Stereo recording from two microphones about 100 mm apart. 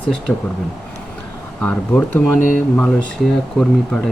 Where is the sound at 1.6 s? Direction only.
15° left (ahead or behind).